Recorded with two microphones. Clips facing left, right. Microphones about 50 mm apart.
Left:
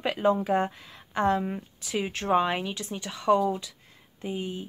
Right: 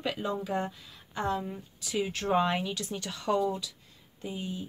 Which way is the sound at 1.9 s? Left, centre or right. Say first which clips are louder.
Left 3 dB; left.